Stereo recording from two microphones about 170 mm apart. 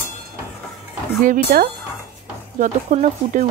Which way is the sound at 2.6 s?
45° right (ahead or behind).